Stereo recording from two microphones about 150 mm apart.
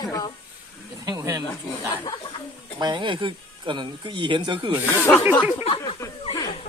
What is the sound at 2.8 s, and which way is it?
Speech, 30° right (ahead or behind).